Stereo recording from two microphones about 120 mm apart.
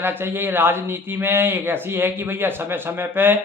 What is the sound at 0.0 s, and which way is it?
A man's voice, 20° right (ahead or behind).